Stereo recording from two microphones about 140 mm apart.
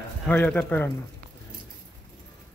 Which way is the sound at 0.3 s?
10° left (ahead or behind).